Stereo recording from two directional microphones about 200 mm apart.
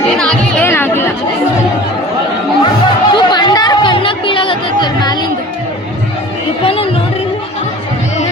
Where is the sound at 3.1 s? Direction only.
20° left (ahead or behind).